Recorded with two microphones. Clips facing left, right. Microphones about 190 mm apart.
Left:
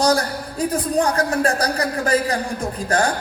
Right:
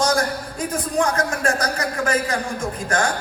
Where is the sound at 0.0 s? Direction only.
35° left (ahead or behind).